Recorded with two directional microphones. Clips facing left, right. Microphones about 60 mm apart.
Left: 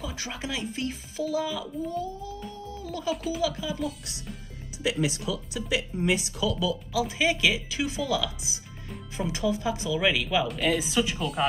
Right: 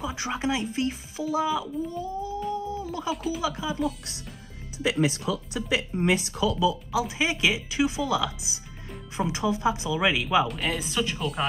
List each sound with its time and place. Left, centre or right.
0.0 s speech: right
3.1 s speech: centre
4.8 s speech: right
6.6 s speech: right
10.5 s speech: centre